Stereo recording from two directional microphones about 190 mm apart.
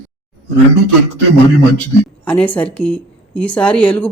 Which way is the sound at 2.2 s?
5° left (ahead or behind).